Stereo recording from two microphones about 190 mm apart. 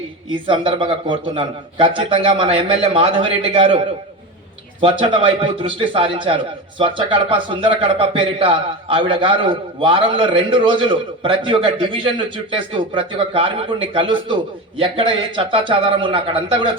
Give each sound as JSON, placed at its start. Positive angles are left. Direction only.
{"t": 0.3, "sound": "a man's voice", "side_deg": -25}
{"t": 4.8, "sound": "a man's voice", "side_deg": -25}